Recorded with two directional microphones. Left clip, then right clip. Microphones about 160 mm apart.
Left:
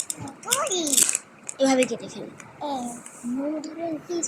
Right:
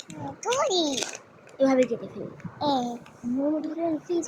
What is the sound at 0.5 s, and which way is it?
Speech, 55° right (ahead or behind).